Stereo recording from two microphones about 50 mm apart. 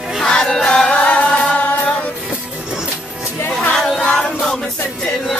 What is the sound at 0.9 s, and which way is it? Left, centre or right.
Music, left.